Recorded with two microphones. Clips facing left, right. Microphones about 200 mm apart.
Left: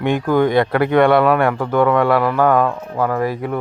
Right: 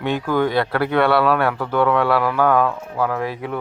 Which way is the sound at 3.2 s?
45° left (ahead or behind).